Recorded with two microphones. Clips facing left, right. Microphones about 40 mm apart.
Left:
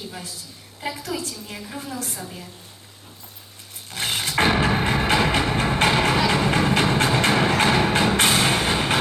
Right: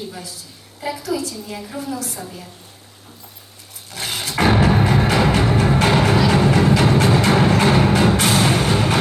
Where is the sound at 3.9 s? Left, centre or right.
Left.